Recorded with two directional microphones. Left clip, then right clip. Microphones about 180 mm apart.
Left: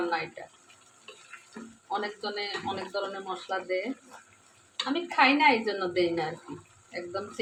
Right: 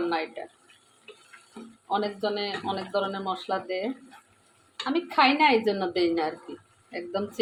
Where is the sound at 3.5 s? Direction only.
45° right (ahead or behind).